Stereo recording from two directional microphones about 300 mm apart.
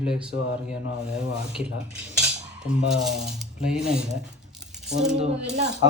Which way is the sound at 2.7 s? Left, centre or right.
Centre.